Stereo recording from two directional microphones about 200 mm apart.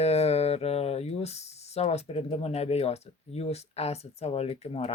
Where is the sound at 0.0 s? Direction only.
30° left (ahead or behind).